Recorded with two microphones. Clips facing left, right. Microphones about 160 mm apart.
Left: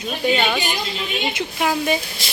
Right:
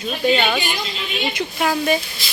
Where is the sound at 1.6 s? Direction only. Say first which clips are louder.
Right 1 dB; 10° left (ahead or behind).